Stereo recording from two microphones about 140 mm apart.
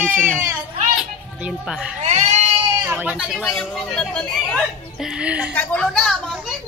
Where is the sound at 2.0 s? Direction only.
55° right (ahead or behind).